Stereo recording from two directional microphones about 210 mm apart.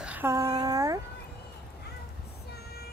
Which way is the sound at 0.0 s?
10° right (ahead or behind).